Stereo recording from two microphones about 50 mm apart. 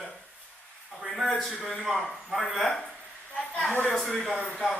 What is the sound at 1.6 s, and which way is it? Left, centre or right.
A man's voice, centre.